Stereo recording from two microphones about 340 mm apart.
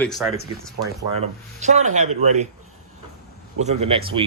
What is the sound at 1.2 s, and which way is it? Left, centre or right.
Speech, centre.